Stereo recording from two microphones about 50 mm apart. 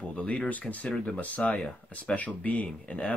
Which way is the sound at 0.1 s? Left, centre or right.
Left.